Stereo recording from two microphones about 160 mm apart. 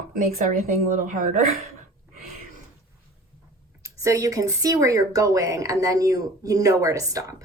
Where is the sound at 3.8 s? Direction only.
20° right (ahead or behind).